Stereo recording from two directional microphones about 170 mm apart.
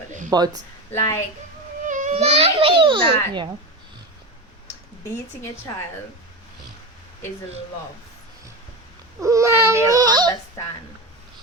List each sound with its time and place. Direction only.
0.3 s speech: 20° right (ahead or behind)
0.9 s a woman's voice: 15° left (ahead or behind)
1.9 s a child's voice: 45° right (ahead or behind); by 3.5 s 30° right (ahead or behind)
9.2 s a child's voice: 15° right (ahead or behind)
10.6 s speech: 20° left (ahead or behind)